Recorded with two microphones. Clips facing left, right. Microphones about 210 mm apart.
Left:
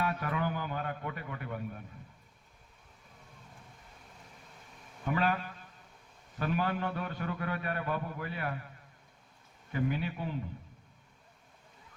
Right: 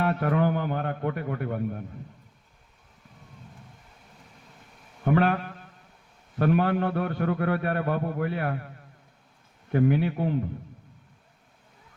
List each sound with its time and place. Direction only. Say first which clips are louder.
0.0 s a man's voice: right 9 dB; 55° right (ahead or behind)
5.0 s a sound: right 8 dB; 60° right (ahead or behind)
6.4 s a man's voice: right 9 dB; 60° right (ahead or behind)
9.7 s a man's voice: right 10 dB; 55° right (ahead or behind)